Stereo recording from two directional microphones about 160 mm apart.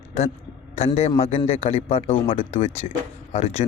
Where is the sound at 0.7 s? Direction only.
40° left (ahead or behind).